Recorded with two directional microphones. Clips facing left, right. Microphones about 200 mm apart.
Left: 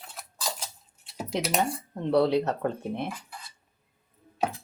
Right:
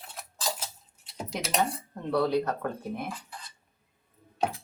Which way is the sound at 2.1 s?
25° left (ahead or behind).